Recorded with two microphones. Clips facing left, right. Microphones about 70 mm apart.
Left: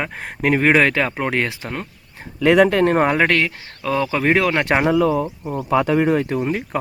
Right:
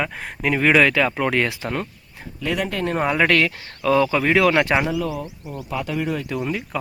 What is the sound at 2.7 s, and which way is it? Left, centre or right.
Speech, left.